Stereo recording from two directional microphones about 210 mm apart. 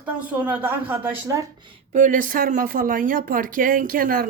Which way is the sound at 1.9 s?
35° right (ahead or behind).